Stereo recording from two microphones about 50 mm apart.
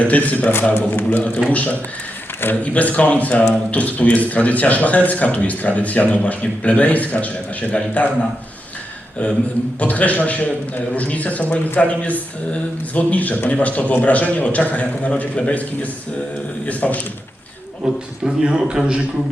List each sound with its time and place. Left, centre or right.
0.1 s a man's voice: left
2.4 s a man's voice: left
2.7 s a man's voice: left
9.8 s a man's voice: left
17.8 s a man's voice: centre